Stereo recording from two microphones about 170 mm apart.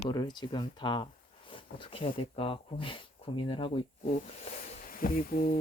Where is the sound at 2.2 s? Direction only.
30° left (ahead or behind).